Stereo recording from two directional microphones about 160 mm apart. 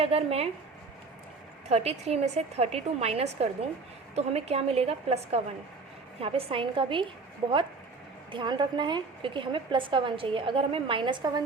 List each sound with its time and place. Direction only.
0.0 s a woman's voice: 40° right (ahead or behind)
1.7 s a woman's voice: 40° right (ahead or behind)
8.3 s a woman's voice: 30° right (ahead or behind)